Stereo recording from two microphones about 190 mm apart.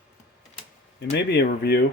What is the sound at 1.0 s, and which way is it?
Speech, 60° left (ahead or behind).